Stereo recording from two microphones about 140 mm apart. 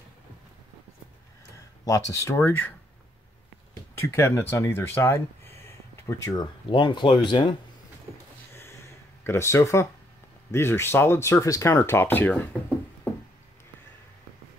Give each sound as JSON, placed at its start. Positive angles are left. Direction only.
{"t": 1.9, "sound": "speech", "side_deg": 25}
{"t": 4.0, "sound": "speech", "side_deg": 20}
{"t": 6.4, "sound": "speech", "side_deg": 35}
{"t": 8.5, "sound": "a sound", "side_deg": 15}
{"t": 10.5, "sound": "speech", "side_deg": 15}